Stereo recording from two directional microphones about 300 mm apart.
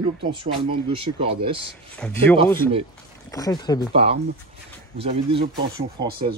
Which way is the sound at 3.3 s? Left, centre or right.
Centre.